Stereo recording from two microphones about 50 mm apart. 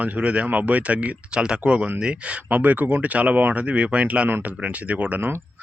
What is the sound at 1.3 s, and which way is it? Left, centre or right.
Speech, centre.